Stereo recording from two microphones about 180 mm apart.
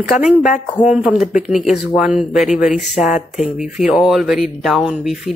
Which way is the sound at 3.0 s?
45° left (ahead or behind).